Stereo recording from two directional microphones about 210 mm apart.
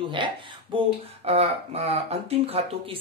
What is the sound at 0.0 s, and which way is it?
Speech, 25° right (ahead or behind).